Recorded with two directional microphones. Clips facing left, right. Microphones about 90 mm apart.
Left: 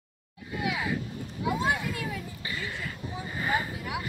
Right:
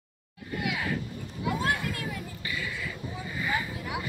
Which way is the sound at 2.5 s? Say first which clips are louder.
Right 1 dB; 45° left (ahead or behind).